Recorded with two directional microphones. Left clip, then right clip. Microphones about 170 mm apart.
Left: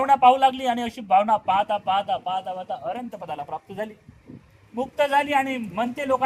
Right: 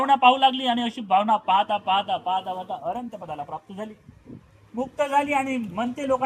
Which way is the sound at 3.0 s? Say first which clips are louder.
Left 1 dB; 30° left (ahead or behind).